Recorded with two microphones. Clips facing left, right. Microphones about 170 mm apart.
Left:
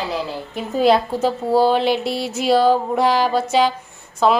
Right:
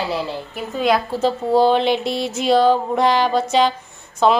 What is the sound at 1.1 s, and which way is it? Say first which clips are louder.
A woman's voice: even; 10° left (ahead or behind).